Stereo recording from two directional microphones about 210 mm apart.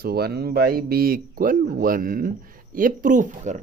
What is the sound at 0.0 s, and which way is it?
Speech, 50° right (ahead or behind).